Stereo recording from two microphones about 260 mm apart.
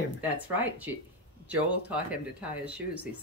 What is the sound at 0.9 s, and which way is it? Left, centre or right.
Speech, centre.